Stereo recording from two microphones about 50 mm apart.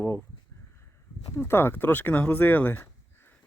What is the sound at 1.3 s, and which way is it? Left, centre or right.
Speech, left.